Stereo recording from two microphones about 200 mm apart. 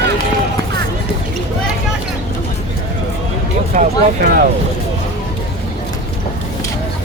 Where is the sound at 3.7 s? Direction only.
50° right (ahead or behind).